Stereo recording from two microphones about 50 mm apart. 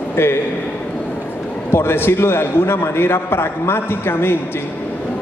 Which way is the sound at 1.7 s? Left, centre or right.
Left.